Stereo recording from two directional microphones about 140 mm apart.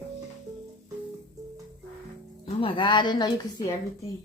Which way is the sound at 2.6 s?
35° left (ahead or behind).